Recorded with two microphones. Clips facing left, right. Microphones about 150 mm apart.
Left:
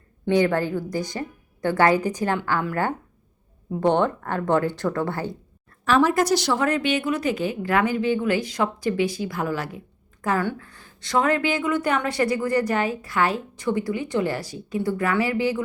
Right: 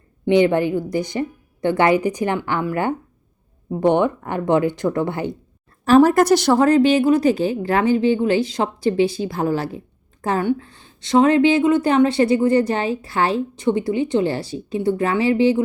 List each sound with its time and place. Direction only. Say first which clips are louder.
0.3 s a woman's voice: right 5 dB; 20° right (ahead or behind)
5.8 s a woman's voice: right 7 dB; 40° right (ahead or behind)
6.1 s a woman's voice: right 6 dB; 55° right (ahead or behind)
6.6 s a woman's voice: right 9 dB; 35° right (ahead or behind)